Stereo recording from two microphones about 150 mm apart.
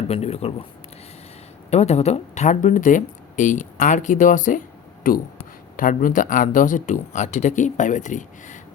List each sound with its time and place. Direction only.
0.1 s speech: 45° left (ahead or behind)
1.7 s speech: 45° left (ahead or behind)